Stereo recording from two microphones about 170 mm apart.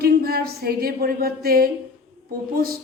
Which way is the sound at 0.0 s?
65° right (ahead or behind).